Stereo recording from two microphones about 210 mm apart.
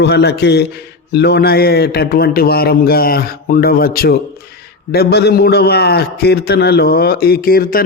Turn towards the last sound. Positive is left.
turn(degrees=45)  # may be behind; listen again after turning